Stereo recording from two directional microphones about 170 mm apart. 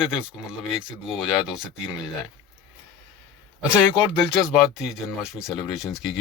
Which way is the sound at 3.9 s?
5° right (ahead or behind).